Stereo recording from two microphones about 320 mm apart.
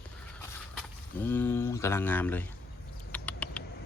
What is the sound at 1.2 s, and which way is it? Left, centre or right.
Speech, centre.